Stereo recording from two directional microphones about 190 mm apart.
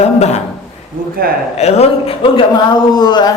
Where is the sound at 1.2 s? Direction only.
50° right (ahead or behind).